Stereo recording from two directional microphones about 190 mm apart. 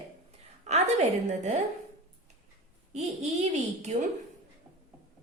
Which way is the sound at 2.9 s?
35° right (ahead or behind).